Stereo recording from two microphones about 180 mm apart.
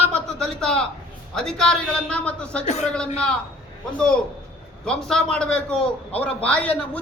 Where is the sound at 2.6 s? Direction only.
40° left (ahead or behind).